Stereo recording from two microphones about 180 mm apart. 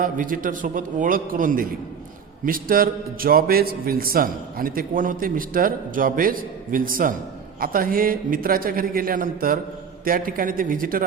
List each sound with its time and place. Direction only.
0.0 s a man's voice: 50° right (ahead or behind)